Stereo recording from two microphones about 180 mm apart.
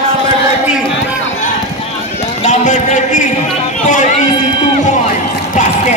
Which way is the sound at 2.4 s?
40° left (ahead or behind).